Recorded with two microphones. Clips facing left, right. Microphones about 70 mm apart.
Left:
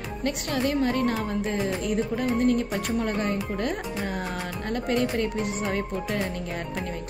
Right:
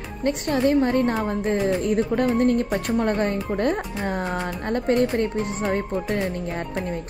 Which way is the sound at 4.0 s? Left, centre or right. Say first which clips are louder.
Right 4 dB; right.